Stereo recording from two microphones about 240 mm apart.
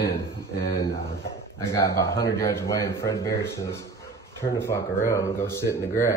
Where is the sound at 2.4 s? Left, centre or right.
Centre.